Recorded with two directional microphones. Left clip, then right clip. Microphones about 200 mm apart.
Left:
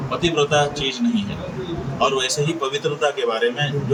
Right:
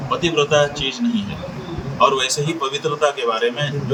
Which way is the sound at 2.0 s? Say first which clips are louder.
Right 4 dB; centre (ahead or behind).